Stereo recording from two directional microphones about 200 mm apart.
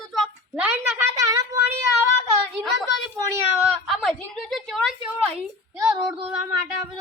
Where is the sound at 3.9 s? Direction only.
Centre (ahead or behind).